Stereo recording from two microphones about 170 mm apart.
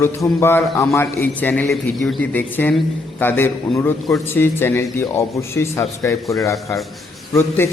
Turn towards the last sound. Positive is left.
turn(degrees=15)  # may be behind; listen again after turning